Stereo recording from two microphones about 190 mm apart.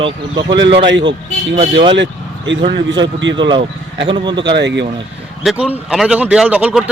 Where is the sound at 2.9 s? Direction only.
75° right (ahead or behind).